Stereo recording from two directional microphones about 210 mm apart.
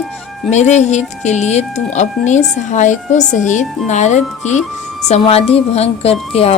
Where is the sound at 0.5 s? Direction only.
35° left (ahead or behind).